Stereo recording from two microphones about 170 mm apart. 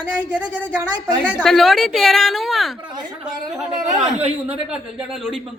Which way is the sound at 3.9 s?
35° right (ahead or behind).